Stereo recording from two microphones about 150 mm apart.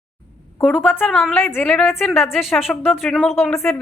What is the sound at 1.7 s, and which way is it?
A woman's voice, centre (ahead or behind).